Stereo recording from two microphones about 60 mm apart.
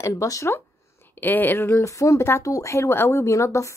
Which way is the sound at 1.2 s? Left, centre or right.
Left.